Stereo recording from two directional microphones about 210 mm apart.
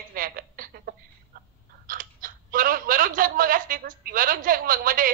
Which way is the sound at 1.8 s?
40° right (ahead or behind).